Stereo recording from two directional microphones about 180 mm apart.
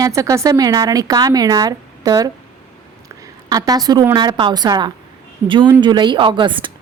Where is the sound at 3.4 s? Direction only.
20° right (ahead or behind).